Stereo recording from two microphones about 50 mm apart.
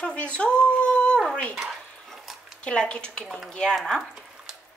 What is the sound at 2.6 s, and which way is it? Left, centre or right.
Speech, centre.